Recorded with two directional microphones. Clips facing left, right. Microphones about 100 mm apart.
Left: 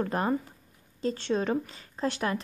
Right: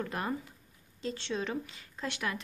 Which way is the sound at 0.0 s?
40° left (ahead or behind).